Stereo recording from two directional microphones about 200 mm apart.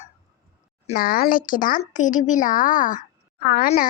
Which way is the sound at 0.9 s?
50° left (ahead or behind).